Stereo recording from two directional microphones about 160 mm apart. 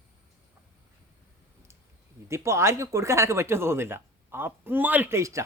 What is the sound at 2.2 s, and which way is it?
Speech, 15° right (ahead or behind).